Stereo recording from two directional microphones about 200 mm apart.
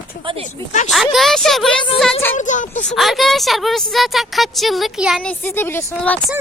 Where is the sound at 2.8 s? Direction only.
Centre (ahead or behind).